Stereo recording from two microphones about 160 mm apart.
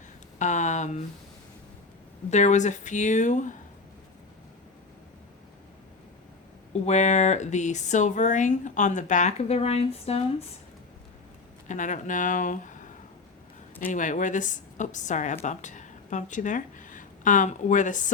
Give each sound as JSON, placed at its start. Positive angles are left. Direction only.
{"t": 0.3, "sound": "speech", "side_deg": 50}
{"t": 2.3, "sound": "speech", "side_deg": 45}
{"t": 6.8, "sound": "speech", "side_deg": 45}
{"t": 11.7, "sound": "a woman's voice", "side_deg": 50}